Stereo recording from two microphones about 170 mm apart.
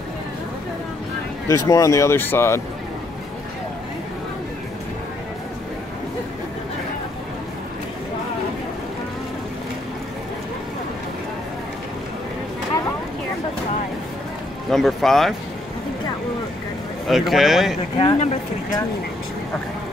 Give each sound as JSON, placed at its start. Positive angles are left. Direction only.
{"t": 1.7, "sound": "speech", "side_deg": 20}
{"t": 14.7, "sound": "speech", "side_deg": 0}
{"t": 17.1, "sound": "speech", "side_deg": 0}
{"t": 17.9, "sound": "speech", "side_deg": 35}